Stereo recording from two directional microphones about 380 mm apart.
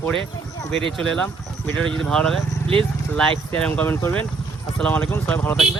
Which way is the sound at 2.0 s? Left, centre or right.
Centre.